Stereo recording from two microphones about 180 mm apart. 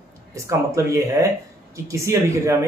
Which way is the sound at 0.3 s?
15° right (ahead or behind).